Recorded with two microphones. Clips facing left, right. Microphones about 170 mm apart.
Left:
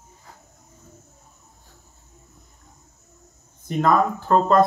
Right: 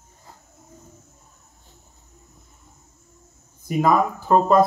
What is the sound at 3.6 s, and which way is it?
Speech, 10° right (ahead or behind).